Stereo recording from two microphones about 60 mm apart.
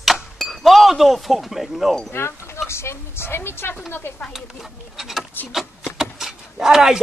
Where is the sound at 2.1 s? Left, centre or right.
Left.